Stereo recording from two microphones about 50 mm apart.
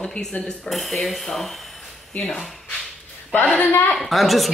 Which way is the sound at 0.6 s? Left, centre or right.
Centre.